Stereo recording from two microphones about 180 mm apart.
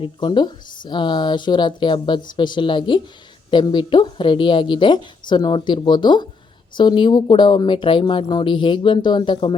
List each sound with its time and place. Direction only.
0.0 s speech: 25° left (ahead or behind)